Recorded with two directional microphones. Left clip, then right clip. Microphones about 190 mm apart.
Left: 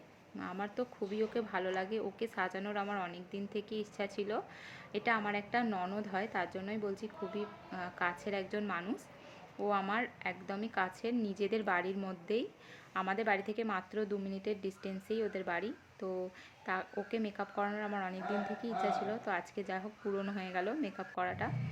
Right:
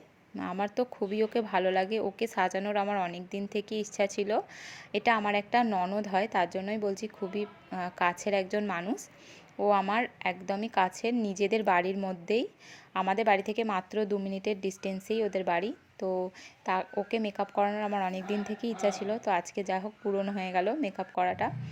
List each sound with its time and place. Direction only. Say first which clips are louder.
0.3 s speech: right 8 dB; 35° right (ahead or behind)